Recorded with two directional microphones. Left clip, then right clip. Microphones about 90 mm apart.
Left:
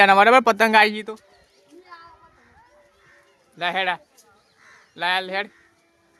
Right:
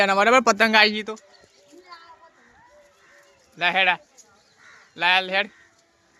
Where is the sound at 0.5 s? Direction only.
30° left (ahead or behind).